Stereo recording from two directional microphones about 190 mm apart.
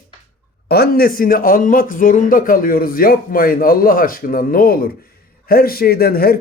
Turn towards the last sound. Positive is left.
turn(degrees=50)  # may be behind; listen again after turning